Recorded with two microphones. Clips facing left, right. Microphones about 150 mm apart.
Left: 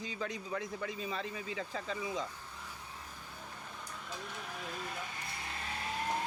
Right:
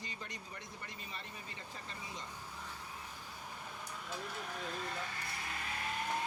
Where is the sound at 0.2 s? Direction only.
90° left.